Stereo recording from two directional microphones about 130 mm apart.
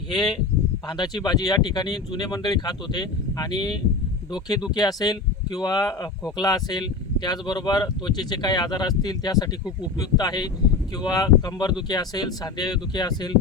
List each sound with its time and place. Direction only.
0.9 s speech: 35° left (ahead or behind)